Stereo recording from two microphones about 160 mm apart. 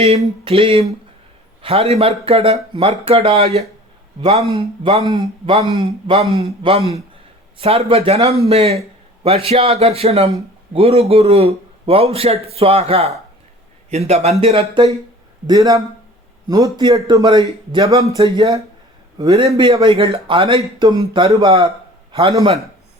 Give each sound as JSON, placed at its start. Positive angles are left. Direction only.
{"t": 0.4, "sound": "a man's voice", "side_deg": -35}
{"t": 15.4, "sound": "a man's voice", "side_deg": -25}